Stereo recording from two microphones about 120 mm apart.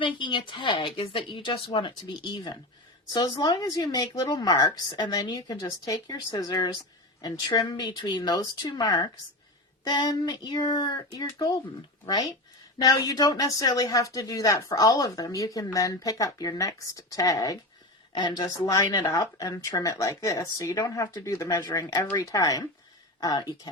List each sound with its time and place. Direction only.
0.0 s speech: 40° left (ahead or behind)
12.0 s speech: 30° left (ahead or behind)